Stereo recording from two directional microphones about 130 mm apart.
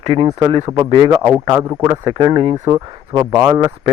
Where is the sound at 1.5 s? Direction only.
20° right (ahead or behind).